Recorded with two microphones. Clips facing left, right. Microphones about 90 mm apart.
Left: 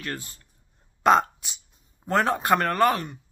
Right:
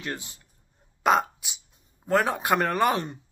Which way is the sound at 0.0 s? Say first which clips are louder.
Even; 20° right (ahead or behind).